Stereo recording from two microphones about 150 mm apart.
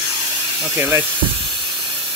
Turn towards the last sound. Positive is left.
turn(degrees=-15)  # may be behind; listen again after turning